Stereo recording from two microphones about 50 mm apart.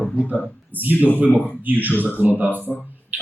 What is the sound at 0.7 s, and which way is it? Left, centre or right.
Speech, right.